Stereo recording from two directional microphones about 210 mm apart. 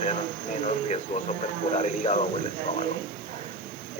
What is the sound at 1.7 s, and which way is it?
Speech, 30° left (ahead or behind).